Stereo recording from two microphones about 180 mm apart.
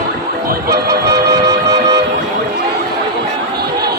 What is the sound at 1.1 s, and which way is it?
Music, 20° right (ahead or behind).